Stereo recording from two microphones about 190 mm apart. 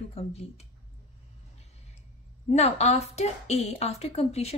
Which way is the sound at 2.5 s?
35° left (ahead or behind).